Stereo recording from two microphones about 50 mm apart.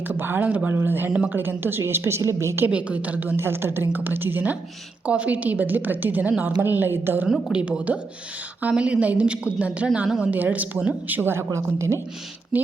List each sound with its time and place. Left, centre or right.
0.1 s a woman's voice: right
0.7 s a woman's voice: right
1.8 s a woman's voice: right
2.6 s a woman's voice: right
3.3 s a woman's voice: right
5.0 s a woman's voice: right
7.5 s speech: centre
7.9 s a woman's voice: right
11.2 s a woman's voice: right
11.5 s speech: right
12.5 s speech: right